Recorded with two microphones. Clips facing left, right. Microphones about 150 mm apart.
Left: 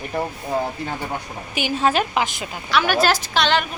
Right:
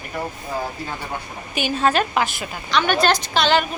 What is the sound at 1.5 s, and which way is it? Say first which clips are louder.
Speech: even; 15° left (ahead or behind).